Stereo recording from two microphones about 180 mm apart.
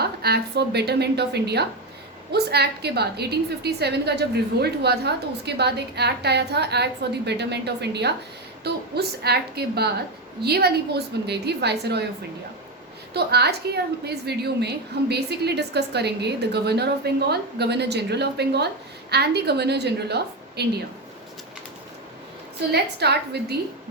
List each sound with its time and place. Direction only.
0.0 s a woman's voice: 60° right (ahead or behind)
13.1 s a woman's voice: 65° right (ahead or behind)
22.7 s a woman's voice: 65° right (ahead or behind)